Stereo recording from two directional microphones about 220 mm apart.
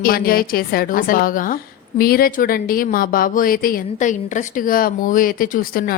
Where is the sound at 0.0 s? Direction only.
40° left (ahead or behind).